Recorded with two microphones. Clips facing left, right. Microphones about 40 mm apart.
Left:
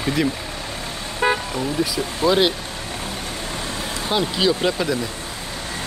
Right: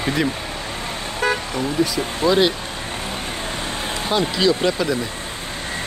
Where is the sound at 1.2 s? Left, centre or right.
Left.